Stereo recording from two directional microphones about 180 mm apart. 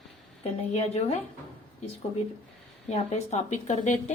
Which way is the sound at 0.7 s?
35° left (ahead or behind).